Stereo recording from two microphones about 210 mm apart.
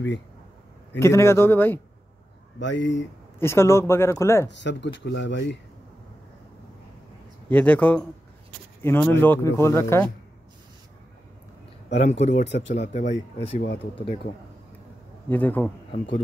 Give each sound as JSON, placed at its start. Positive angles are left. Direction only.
{"t": 0.9, "sound": "speech", "side_deg": 10}
{"t": 2.6, "sound": "speech", "side_deg": 60}
{"t": 3.3, "sound": "speech", "side_deg": 10}
{"t": 4.5, "sound": "speech", "side_deg": 55}
{"t": 7.4, "sound": "speech", "side_deg": 10}
{"t": 11.9, "sound": "speech", "side_deg": 30}
{"t": 15.2, "sound": "speech", "side_deg": 10}